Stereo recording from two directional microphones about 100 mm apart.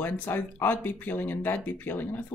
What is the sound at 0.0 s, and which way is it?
Speech, 20° left (ahead or behind).